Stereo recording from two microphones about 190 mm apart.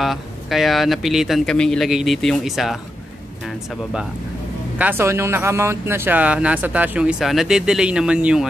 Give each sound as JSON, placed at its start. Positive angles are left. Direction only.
{"t": 0.0, "sound": "speech", "side_deg": 0}